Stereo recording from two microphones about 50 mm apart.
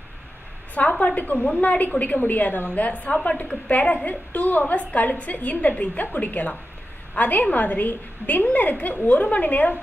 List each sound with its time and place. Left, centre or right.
0.7 s a woman's voice: left